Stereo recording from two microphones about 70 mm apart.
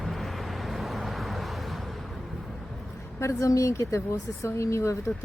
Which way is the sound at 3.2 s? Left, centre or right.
Left.